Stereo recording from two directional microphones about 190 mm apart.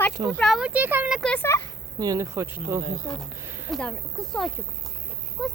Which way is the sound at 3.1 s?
20° left (ahead or behind).